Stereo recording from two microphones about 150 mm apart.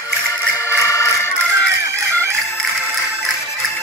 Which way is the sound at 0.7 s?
20° left (ahead or behind).